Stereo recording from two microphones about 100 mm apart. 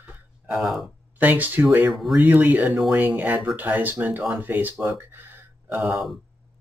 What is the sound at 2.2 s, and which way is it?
Speech, 15° right (ahead or behind).